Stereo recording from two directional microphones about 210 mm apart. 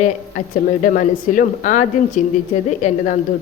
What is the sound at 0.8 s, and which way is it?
A woman's voice, 35° left (ahead or behind).